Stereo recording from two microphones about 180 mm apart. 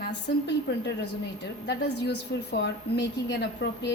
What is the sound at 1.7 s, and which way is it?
A woman's voice, 70° left (ahead or behind).